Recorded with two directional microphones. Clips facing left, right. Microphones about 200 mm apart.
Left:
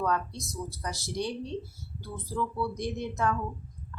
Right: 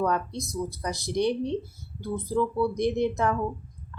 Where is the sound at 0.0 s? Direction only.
20° right (ahead or behind).